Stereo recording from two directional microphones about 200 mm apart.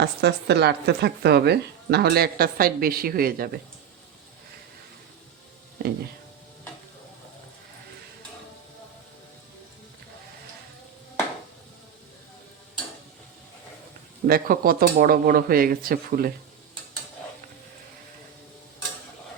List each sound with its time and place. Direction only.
0.0 s speech: 55° right (ahead or behind)
5.8 s speech: 50° right (ahead or behind)
14.3 s speech: 45° right (ahead or behind)